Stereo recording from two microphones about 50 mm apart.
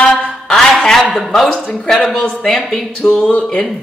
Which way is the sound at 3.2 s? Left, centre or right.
Left.